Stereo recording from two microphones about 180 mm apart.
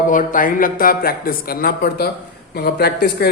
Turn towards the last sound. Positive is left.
turn(degrees=60)  # may be behind; listen again after turning